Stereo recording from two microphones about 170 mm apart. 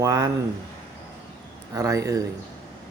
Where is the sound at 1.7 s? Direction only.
20° right (ahead or behind).